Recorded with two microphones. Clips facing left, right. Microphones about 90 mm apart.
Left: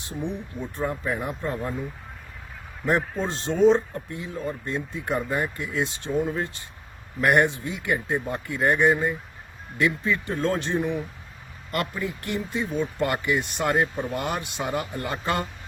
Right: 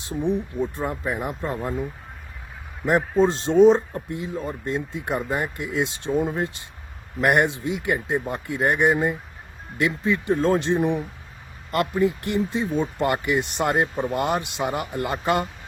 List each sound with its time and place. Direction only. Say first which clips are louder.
0.1 s speech: right 7 dB; 15° right (ahead or behind)
2.8 s speech: right 6 dB; 20° right (ahead or behind)